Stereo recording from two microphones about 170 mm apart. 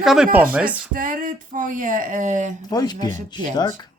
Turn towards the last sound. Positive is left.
turn(degrees=-45)  # may be behind; listen again after turning